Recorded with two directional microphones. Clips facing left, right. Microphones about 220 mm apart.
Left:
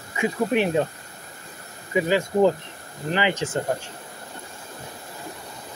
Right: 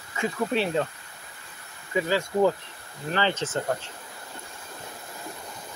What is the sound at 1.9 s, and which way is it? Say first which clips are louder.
Speech: left 4 dB; 20° left (ahead or behind).